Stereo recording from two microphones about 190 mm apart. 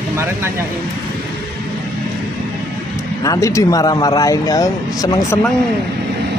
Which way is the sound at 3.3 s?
15° left (ahead or behind).